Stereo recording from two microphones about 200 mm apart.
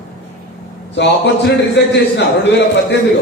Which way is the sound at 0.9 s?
60° left (ahead or behind).